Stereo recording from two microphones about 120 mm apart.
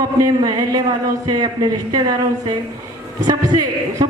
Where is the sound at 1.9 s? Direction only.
35° right (ahead or behind).